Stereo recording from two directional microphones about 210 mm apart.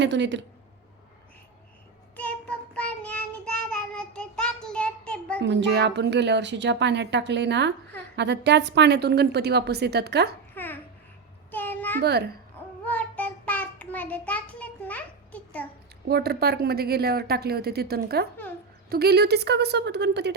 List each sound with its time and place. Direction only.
0.0 s a woman's voice: 55° right (ahead or behind)
2.1 s child singing: 5° left (ahead or behind)
5.4 s a woman's voice: 55° right (ahead or behind)
10.5 s babbling: 10° left (ahead or behind)
11.5 s a sound: 10° left (ahead or behind)
11.9 s a woman's voice: 50° right (ahead or behind)
12.8 s child singing: 5° left (ahead or behind)
16.0 s a woman's voice: 50° right (ahead or behind)